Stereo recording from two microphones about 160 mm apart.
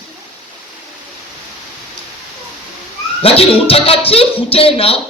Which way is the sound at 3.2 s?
35° left (ahead or behind).